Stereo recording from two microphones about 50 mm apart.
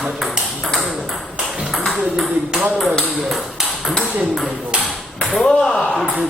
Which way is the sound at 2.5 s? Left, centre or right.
Centre.